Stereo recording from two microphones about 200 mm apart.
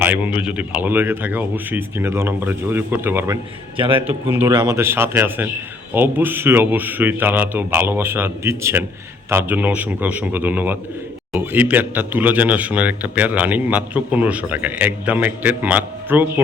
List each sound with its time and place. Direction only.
0.0 s a man's voice: 10° right (ahead or behind)
3.8 s a man's voice: 25° right (ahead or behind)
4.0 s a man's voice: 10° right (ahead or behind)